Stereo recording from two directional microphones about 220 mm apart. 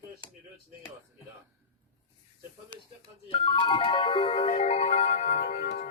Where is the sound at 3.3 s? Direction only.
25° left (ahead or behind).